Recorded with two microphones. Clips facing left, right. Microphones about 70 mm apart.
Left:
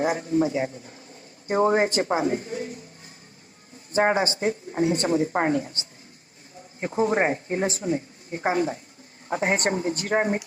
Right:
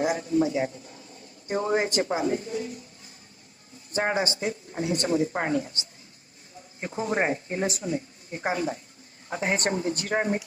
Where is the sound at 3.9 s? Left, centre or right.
Left.